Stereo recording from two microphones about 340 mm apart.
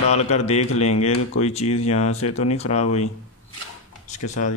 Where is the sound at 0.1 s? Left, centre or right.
Centre.